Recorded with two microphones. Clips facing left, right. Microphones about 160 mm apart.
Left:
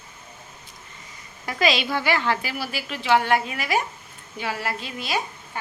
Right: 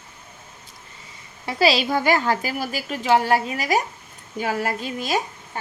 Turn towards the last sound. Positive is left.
turn(degrees=-45)  # may be behind; listen again after turning